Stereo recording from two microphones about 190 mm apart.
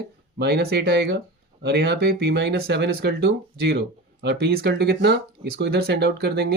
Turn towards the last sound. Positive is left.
turn(degrees=-60)  # may be behind; listen again after turning